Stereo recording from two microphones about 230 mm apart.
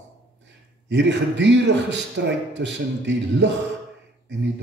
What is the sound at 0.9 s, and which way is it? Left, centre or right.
A man's voice, right.